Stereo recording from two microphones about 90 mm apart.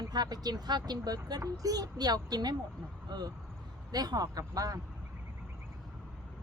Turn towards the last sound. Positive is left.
turn(degrees=-40)  # may be behind; listen again after turning